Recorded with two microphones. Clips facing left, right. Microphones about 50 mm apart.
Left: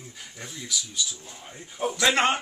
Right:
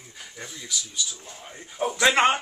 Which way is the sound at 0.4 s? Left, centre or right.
Centre.